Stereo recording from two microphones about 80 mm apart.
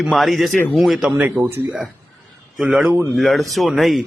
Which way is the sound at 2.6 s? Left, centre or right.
Centre.